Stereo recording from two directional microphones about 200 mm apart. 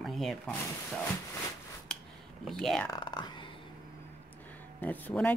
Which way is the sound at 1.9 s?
5° left (ahead or behind).